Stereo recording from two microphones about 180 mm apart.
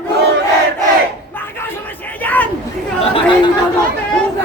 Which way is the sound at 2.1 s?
10° left (ahead or behind).